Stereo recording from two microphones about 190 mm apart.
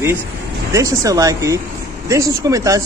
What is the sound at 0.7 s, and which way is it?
A man's voice, 20° right (ahead or behind).